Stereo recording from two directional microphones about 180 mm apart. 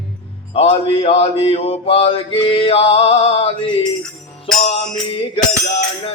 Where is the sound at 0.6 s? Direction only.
35° left (ahead or behind).